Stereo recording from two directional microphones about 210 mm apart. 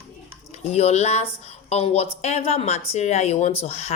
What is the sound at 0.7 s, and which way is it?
Speech, 30° left (ahead or behind).